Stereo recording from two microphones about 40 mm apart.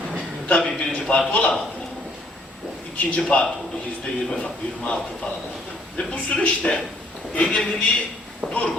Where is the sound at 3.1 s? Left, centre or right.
Left.